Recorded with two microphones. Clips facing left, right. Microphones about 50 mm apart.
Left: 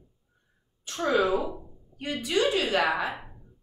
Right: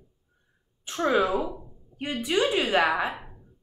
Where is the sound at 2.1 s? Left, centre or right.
Right.